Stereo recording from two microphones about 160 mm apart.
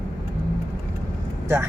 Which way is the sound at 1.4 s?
15° right (ahead or behind).